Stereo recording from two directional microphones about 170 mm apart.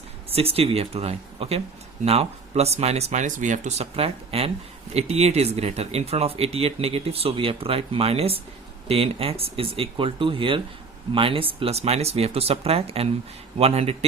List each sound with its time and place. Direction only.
0.3 s speech: 35° right (ahead or behind)